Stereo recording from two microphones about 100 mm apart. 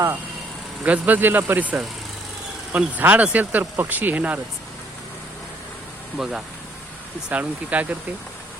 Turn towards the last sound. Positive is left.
turn(degrees=-15)  # may be behind; listen again after turning